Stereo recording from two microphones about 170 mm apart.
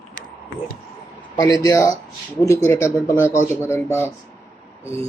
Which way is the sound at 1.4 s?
20° left (ahead or behind).